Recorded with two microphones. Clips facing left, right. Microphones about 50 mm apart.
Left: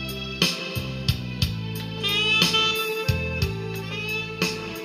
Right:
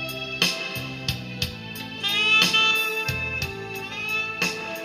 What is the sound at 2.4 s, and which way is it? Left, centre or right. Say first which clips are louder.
Music: right 1 dB; right.